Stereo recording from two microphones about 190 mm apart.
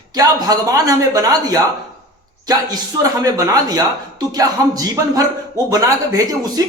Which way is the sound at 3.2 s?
20° right (ahead or behind).